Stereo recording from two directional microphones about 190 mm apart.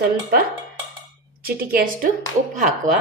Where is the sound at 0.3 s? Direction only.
55° right (ahead or behind).